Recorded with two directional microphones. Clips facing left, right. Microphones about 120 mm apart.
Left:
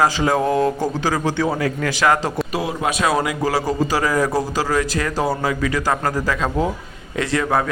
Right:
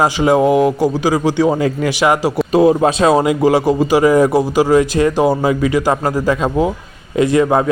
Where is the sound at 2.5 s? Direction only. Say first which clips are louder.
Right 11 dB; 30° right (ahead or behind).